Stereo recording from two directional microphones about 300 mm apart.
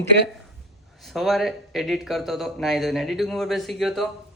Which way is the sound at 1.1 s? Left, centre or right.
Centre.